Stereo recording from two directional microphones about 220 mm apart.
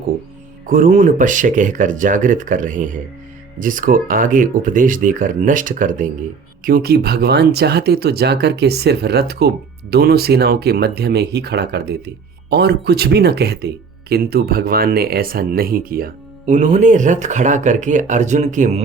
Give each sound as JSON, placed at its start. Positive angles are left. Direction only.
{"t": 0.7, "sound": "speech", "side_deg": -35}